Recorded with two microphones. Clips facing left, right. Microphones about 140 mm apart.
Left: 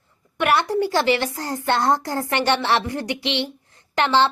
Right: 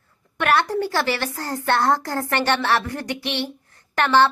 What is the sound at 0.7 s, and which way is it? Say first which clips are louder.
A woman's voice: left 3 dB; 15° left (ahead or behind).